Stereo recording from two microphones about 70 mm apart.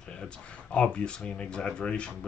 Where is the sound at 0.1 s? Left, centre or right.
Centre.